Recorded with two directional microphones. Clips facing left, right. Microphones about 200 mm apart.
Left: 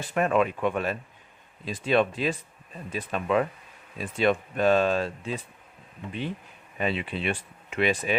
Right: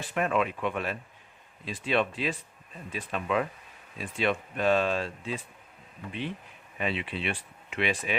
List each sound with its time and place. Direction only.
0.1 s speech: 45° left (ahead or behind)
6.7 s speech: 40° left (ahead or behind)